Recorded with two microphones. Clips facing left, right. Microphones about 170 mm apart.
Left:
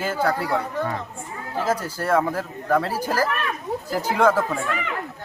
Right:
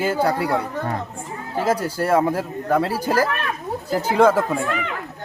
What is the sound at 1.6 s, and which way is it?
Speech, 30° right (ahead or behind).